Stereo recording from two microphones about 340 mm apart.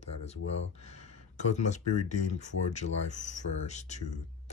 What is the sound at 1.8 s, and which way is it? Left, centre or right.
Speech, left.